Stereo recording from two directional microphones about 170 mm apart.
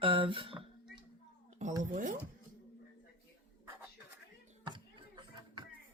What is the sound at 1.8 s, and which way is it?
Speech, 45° right (ahead or behind).